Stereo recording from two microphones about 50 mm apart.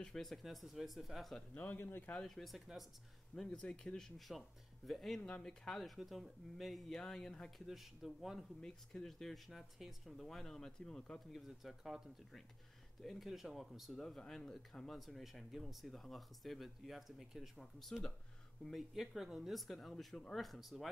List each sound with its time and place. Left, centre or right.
0.0 s speech: centre
1.5 s speech: left
1.8 s speech: left
2.2 s speech: centre
3.3 s speech: centre
5.2 s speech: centre
5.9 s speech: centre
7.5 s speech: centre
8.5 s speech: centre
11.3 s speech: centre
13.0 s speech: centre
14.0 s speech: centre
17.6 s speech: centre